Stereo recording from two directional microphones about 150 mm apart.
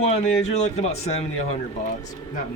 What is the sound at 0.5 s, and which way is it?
Speech, 45° left (ahead or behind).